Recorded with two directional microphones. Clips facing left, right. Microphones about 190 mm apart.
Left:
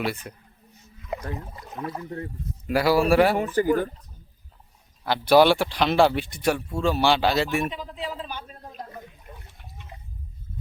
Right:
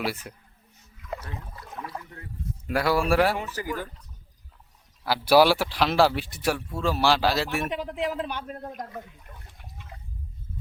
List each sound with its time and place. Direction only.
0.0 s speech: 5° right (ahead or behind)
1.0 s rowboat: 20° left (ahead or behind)
1.4 s speech: 25° left (ahead or behind)
2.6 s speech: centre (ahead or behind)
3.3 s speech: 55° left (ahead or behind)
5.0 s speech: 5° right (ahead or behind)
7.7 s speech: 70° right (ahead or behind)
9.3 s speech: 20° left (ahead or behind)
9.9 s a sound: 15° left (ahead or behind)